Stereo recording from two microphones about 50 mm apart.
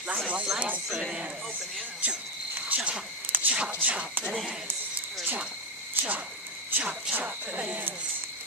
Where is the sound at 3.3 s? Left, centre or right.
Right.